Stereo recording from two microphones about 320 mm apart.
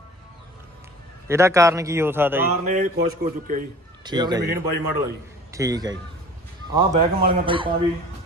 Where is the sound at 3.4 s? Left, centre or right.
Right.